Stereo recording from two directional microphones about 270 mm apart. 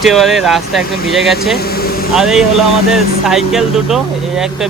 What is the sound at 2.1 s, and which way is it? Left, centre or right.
Speech, centre.